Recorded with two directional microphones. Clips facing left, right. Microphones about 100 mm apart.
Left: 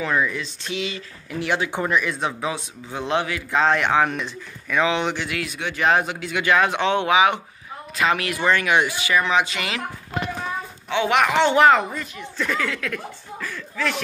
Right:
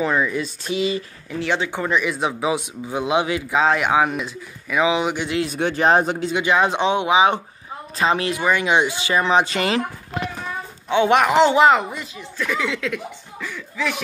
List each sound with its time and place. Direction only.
0.1 s speech: 10° right (ahead or behind)
0.7 s speech: 40° right (ahead or behind)
1.4 s speech: 10° left (ahead or behind)
1.9 s speech: centre (ahead or behind); by 3.4 s 20° right (ahead or behind)
3.4 s speech: 5° right (ahead or behind)
5.2 s speech: 25° right (ahead or behind)
5.5 s speech: 40° right (ahead or behind)
8.4 s speech: 10° right (ahead or behind); by 9.8 s 35° right (ahead or behind)
10.9 s speech: 25° right (ahead or behind)
13.5 s a sound: 10° right (ahead or behind)